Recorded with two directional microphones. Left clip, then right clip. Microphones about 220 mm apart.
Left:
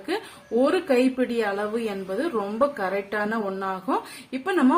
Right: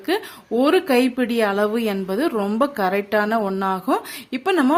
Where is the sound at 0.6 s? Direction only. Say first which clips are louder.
Right 4 dB; 50° right (ahead or behind).